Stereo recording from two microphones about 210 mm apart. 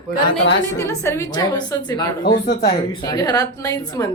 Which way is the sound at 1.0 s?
15° left (ahead or behind).